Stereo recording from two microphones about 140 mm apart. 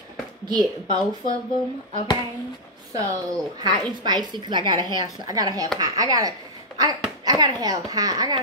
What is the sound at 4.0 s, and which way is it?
A woman's voice, 30° right (ahead or behind).